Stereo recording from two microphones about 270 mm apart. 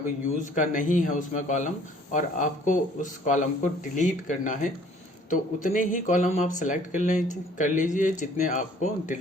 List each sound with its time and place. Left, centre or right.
0.3 s speech: left